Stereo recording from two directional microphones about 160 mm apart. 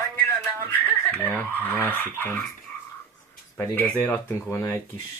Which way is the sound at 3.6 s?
10° left (ahead or behind).